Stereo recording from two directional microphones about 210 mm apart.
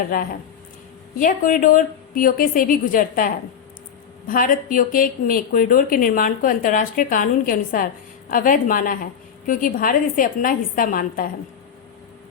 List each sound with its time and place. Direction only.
1.2 s a woman's voice: 40° left (ahead or behind)